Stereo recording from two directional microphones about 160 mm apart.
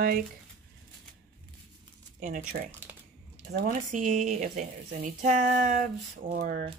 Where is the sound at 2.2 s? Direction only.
60° right (ahead or behind).